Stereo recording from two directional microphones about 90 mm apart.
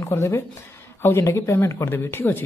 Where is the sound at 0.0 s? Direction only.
30° left (ahead or behind).